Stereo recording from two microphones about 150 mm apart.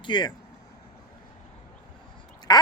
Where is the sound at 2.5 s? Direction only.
30° left (ahead or behind).